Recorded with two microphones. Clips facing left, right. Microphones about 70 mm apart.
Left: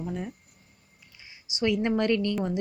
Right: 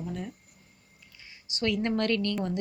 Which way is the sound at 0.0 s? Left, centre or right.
Centre.